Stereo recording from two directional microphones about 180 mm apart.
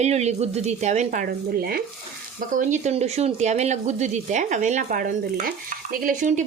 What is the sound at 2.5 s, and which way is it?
Speech, 45° right (ahead or behind).